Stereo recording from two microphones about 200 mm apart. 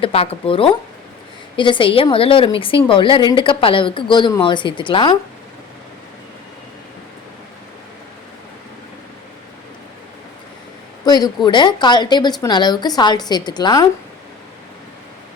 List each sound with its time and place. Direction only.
0.0 s a woman's voice: 30° left (ahead or behind)
11.0 s a woman's voice: 20° left (ahead or behind)